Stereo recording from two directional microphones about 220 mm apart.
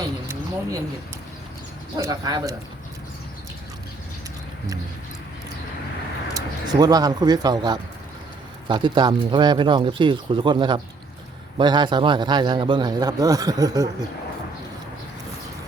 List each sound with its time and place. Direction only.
0.0 s a sound: 15° right (ahead or behind)
2.0 s speech: 15° right (ahead or behind)
6.3 s a man's voice: 20° right (ahead or behind)